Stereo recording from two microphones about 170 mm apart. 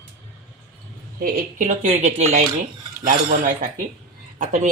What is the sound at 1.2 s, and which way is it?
Speech, 55° right (ahead or behind).